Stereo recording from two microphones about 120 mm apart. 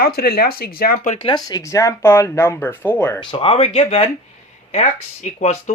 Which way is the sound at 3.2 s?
45° left (ahead or behind).